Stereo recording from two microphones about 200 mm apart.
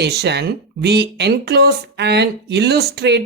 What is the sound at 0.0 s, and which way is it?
Speech, 55° right (ahead or behind).